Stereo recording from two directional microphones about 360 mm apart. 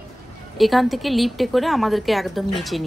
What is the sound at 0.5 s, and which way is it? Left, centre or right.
A woman's voice, centre.